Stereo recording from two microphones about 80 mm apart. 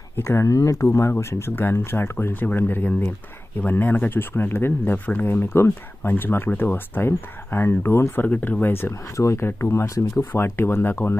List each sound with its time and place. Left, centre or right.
0.2 s speech: left
9.1 s speech: left
10.3 s speech: left